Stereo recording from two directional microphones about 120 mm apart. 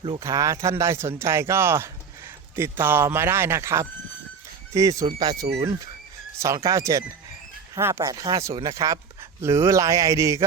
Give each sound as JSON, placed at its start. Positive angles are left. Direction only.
{"t": 0.2, "sound": "speech", "side_deg": -25}